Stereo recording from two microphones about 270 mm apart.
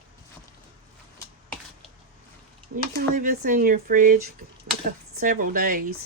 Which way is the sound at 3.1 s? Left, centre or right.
Right.